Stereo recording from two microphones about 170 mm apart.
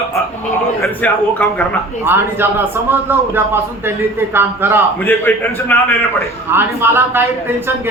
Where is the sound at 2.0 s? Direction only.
10° right (ahead or behind).